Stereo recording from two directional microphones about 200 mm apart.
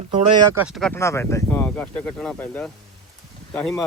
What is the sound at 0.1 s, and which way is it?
Speech, 25° right (ahead or behind).